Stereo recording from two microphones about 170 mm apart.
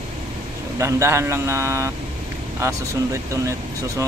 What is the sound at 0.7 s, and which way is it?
Speech, 15° right (ahead or behind).